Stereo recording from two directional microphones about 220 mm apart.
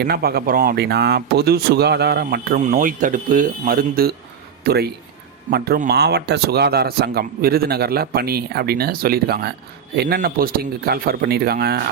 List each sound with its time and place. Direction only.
0.0 s speech: 45° right (ahead or behind)